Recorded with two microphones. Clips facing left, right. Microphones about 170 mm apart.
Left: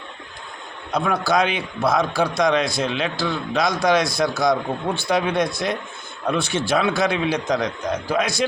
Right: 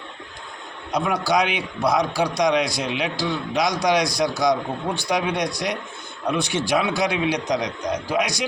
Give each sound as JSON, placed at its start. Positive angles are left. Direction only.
{"t": 0.9, "sound": "a man's voice", "side_deg": -15}